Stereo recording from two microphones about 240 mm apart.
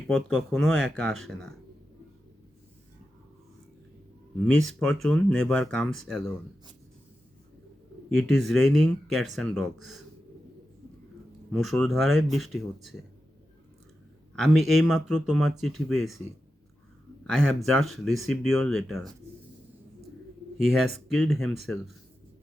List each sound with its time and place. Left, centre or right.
0.1 s speech: centre
4.5 s speech: centre
8.1 s speech: centre
11.5 s speech: centre
14.3 s speech: centre
17.7 s speech: centre
20.7 s speech: centre